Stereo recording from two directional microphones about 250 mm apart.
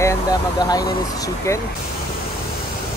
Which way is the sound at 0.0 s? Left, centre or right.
Centre.